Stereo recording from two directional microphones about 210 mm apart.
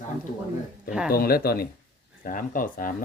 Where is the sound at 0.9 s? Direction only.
5° right (ahead or behind).